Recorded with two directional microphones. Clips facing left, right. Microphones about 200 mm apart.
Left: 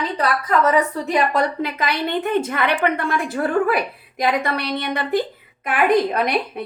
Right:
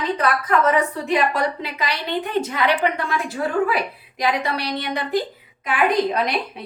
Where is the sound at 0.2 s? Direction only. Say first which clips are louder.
Left 2 dB; 40° left (ahead or behind).